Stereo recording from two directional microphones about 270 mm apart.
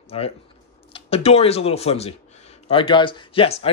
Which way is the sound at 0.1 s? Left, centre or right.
Left.